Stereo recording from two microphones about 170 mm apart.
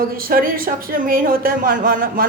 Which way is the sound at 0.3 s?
60° right (ahead or behind).